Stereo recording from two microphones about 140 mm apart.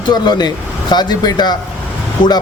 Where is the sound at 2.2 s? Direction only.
70° left (ahead or behind).